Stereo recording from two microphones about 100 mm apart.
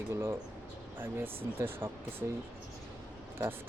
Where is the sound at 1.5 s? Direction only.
20° right (ahead or behind).